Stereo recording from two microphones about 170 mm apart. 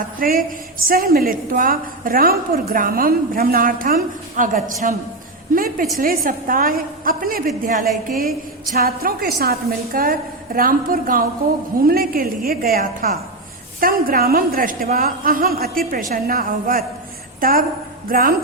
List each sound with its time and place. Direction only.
0.2 s a woman's voice: 60° right (ahead or behind)